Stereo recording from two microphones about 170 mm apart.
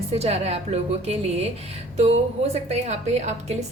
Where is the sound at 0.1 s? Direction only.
35° right (ahead or behind).